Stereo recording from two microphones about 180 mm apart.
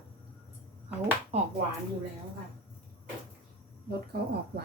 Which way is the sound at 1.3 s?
35° right (ahead or behind).